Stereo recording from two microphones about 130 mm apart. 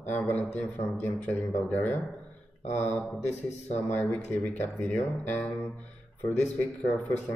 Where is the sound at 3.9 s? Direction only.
15° left (ahead or behind).